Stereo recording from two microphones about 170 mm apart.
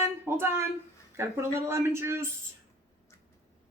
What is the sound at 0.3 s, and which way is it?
Speech, 15° right (ahead or behind).